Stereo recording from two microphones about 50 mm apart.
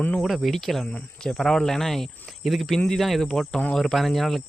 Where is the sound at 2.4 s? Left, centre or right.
Centre.